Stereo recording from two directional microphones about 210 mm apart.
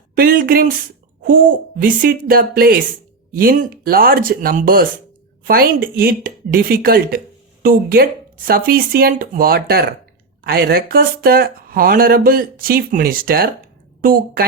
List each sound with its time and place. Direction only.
0.2 s a woman's voice: 45° right (ahead or behind)